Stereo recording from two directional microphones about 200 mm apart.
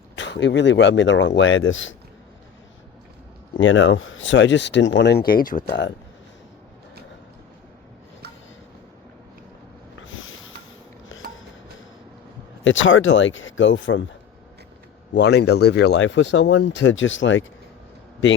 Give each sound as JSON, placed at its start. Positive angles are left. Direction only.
{"t": 0.2, "sound": "speech", "side_deg": 60}
{"t": 1.4, "sound": "speech", "side_deg": 75}
{"t": 3.6, "sound": "speech", "side_deg": 70}
{"t": 10.0, "sound": "snort", "side_deg": 75}
{"t": 11.1, "sound": "music", "side_deg": 80}
{"t": 12.6, "sound": "speech", "side_deg": 70}
{"t": 15.1, "sound": "speech", "side_deg": 55}